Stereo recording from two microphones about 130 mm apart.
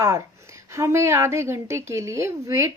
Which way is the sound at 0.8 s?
20° right (ahead or behind).